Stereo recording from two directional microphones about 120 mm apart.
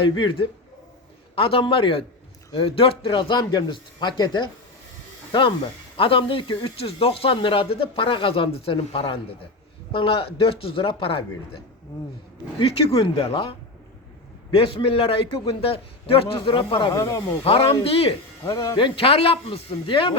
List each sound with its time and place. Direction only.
0.0 s speech: 45° left (ahead or behind)
16.9 s speech: 25° left (ahead or behind)
17.4 s speech: 50° left (ahead or behind)
18.4 s speech: 30° left (ahead or behind)
18.8 s speech: 45° left (ahead or behind)